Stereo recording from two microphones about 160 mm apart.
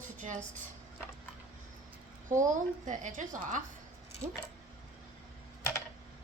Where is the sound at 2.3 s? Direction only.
55° right (ahead or behind).